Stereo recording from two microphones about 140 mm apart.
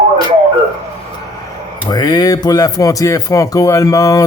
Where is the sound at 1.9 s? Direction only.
30° left (ahead or behind).